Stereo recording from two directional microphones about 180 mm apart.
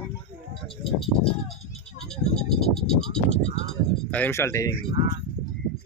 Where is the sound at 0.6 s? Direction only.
Centre (ahead or behind).